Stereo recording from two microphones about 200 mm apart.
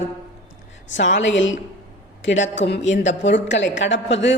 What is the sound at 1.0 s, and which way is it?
A woman's voice, 65° left (ahead or behind).